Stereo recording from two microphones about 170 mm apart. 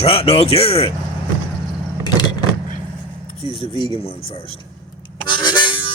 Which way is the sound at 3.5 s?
30° left (ahead or behind).